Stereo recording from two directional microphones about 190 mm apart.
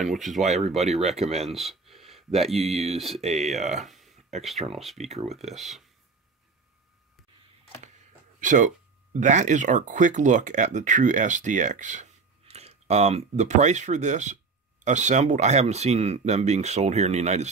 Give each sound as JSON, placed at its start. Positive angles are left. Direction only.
{"t": 0.0, "sound": "speech", "side_deg": 0}
{"t": 0.7, "sound": "speech", "side_deg": -35}
{"t": 1.5, "sound": "a sound", "side_deg": 0}
{"t": 2.5, "sound": "speech", "side_deg": 0}
{"t": 3.2, "sound": "speech", "side_deg": -35}
{"t": 3.4, "sound": "speech", "side_deg": 0}
{"t": 3.8, "sound": "a sound", "side_deg": 0}
{"t": 5.2, "sound": "speech", "side_deg": -35}
{"t": 5.5, "sound": "speech", "side_deg": 0}
{"t": 8.4, "sound": "speech", "side_deg": -45}